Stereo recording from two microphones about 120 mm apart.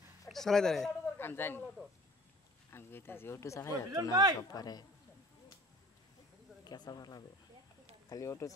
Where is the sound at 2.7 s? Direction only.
20° left (ahead or behind).